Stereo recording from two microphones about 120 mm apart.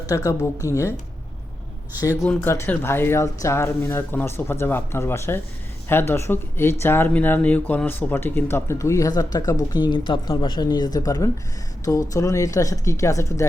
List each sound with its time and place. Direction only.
0.1 s speech: 30° left (ahead or behind)
2.2 s speech: 15° left (ahead or behind)